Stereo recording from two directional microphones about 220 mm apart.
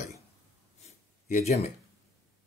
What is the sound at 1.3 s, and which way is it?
Speech, 30° left (ahead or behind).